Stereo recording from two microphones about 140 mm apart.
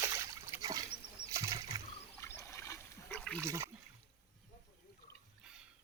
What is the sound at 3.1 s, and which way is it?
Water, 10° left (ahead or behind).